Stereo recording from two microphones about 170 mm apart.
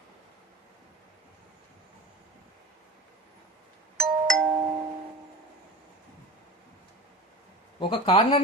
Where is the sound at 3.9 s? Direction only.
5° left (ahead or behind).